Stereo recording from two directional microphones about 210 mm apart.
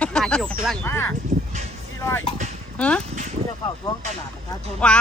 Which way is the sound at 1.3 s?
35° right (ahead or behind).